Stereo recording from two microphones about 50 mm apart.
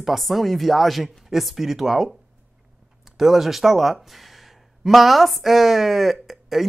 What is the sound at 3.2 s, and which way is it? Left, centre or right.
Speech, centre.